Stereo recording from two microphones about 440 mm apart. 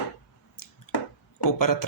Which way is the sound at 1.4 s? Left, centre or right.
Left.